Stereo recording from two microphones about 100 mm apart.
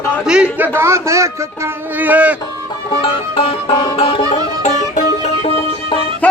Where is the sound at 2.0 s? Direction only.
15° right (ahead or behind).